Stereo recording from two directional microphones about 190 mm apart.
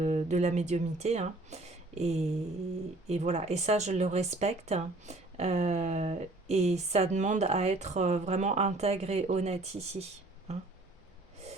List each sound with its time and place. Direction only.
0.0 s speech: 35° right (ahead or behind)